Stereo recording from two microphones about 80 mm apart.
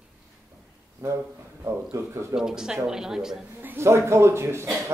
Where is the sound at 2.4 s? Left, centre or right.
Centre.